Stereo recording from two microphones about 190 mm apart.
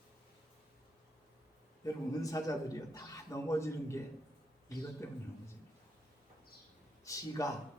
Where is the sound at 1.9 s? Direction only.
20° left (ahead or behind).